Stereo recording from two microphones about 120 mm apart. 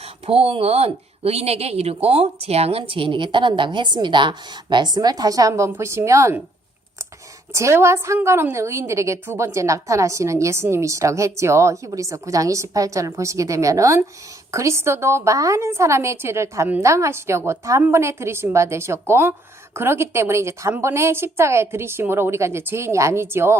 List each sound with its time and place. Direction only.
0.3 s speech: 50° right (ahead or behind); by 6.4 s 25° right (ahead or behind)
7.5 s a woman's voice: 25° right (ahead or behind)